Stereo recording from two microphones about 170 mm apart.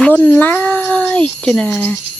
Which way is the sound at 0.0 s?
10° left (ahead or behind).